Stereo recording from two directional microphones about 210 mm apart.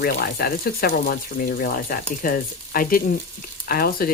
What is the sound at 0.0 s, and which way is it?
Speech, 45° left (ahead or behind).